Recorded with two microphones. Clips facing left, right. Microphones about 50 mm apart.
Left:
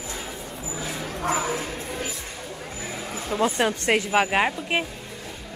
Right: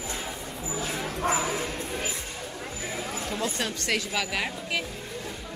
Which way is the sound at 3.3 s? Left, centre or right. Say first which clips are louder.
Left 11 dB; left.